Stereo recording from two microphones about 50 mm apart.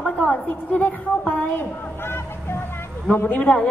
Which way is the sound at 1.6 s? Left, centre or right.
Left.